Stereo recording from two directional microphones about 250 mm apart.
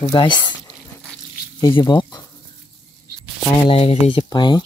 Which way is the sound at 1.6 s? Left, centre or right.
Centre.